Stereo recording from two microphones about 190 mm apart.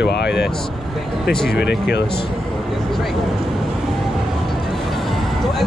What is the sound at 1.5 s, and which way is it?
Speech, 60° left (ahead or behind).